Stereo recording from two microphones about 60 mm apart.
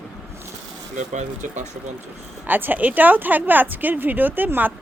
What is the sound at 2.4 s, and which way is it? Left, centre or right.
Speech, right.